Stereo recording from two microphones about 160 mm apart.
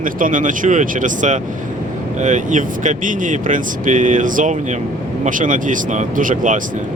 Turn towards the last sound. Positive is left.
turn(degrees=-55)  # may be behind; listen again after turning